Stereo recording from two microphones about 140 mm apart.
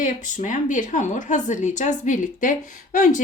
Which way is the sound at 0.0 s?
65° left (ahead or behind).